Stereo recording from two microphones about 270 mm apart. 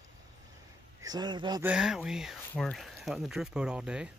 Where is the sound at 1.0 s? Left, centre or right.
Centre.